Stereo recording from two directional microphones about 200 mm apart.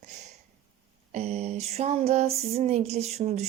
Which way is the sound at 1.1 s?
35° right (ahead or behind).